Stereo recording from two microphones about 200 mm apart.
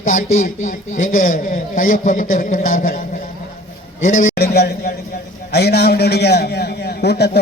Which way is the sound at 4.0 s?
40° left (ahead or behind).